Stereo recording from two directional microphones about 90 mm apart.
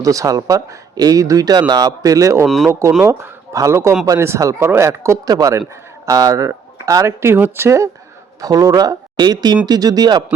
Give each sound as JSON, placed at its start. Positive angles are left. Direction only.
{"t": 0.0, "sound": "speech", "side_deg": -40}
{"t": 3.5, "sound": "speech", "side_deg": -35}
{"t": 8.4, "sound": "speech", "side_deg": -45}